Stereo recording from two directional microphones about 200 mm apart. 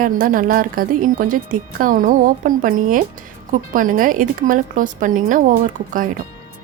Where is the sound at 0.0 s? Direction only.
45° right (ahead or behind).